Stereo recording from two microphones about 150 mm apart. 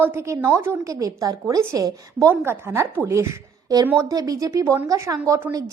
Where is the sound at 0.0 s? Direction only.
15° right (ahead or behind).